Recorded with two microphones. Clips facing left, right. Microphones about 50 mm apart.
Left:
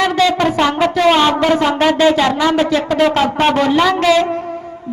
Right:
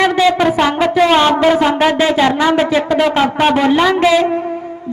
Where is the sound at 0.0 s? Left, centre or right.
Centre.